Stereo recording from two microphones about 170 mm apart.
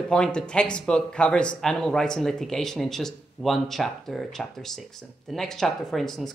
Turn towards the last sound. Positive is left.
turn(degrees=0)  # may be behind; listen again after turning